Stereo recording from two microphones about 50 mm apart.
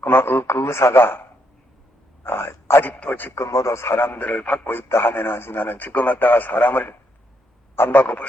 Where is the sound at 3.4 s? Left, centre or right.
Left.